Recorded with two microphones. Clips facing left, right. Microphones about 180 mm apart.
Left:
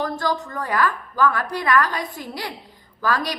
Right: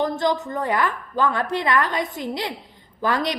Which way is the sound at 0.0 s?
20° right (ahead or behind).